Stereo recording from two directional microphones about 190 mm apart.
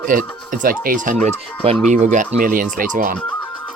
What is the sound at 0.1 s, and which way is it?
Speech, 45° right (ahead or behind).